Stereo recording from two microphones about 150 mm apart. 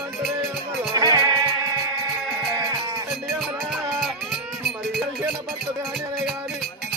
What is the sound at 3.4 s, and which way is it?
Music, centre (ahead or behind).